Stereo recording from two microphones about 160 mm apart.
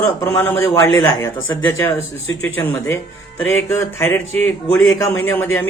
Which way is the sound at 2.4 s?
10° left (ahead or behind).